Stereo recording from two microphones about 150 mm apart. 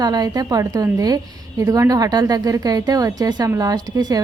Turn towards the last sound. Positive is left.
turn(degrees=-25)  # may be behind; listen again after turning